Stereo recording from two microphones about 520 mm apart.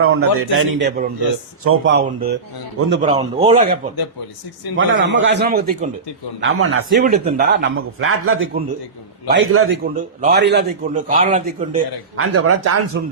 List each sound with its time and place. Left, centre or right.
0.0 s a man's voice: right
4.8 s speech: right
6.9 s a man's voice: centre
12.3 s speech: right